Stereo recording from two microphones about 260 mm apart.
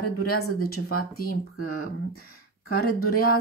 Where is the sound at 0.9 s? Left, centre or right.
Left.